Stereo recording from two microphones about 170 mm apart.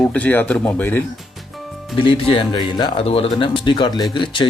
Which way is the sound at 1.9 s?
30° left (ahead or behind).